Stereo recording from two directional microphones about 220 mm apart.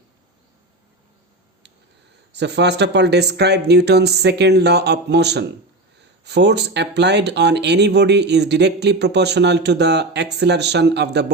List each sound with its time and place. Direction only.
2.3 s speech: 50° right (ahead or behind)